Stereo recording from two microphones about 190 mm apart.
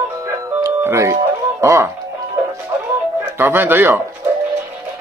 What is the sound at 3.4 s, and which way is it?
Speech, 10° right (ahead or behind).